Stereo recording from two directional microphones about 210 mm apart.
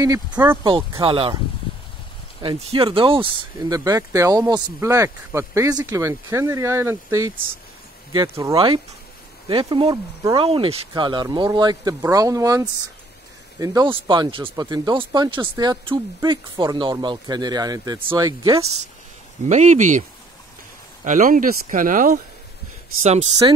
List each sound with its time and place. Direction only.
0.0 s speech: 15° right (ahead or behind)
0.7 s speech: 25° right (ahead or behind)
2.4 s speech: 25° right (ahead or behind)
19.5 s speech: 35° right (ahead or behind)
23.4 s speech: 20° right (ahead or behind)